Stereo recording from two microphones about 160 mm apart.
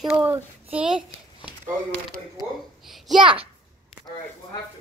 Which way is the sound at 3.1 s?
30° right (ahead or behind).